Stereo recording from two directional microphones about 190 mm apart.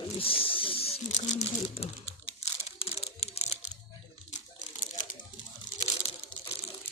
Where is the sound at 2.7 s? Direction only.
30° left (ahead or behind).